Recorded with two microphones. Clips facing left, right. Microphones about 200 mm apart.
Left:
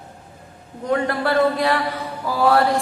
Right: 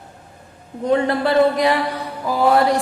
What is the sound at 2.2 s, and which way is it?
Mantra, 20° right (ahead or behind).